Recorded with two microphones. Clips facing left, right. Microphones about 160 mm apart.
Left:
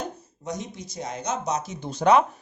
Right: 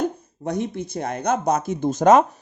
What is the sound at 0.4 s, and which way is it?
Speech, 60° right (ahead or behind).